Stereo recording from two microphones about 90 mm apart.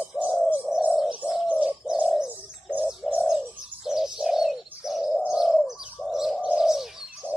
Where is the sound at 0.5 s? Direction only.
15° right (ahead or behind).